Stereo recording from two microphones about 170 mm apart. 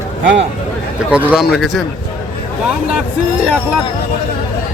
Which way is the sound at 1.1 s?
5° right (ahead or behind).